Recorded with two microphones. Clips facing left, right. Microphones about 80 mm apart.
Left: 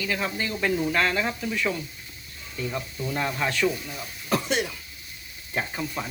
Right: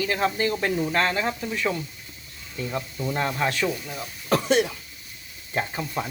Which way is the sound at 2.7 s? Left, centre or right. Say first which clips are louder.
Right 4 dB; right.